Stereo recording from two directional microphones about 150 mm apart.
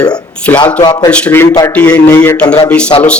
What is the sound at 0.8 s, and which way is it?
Speech, 30° left (ahead or behind).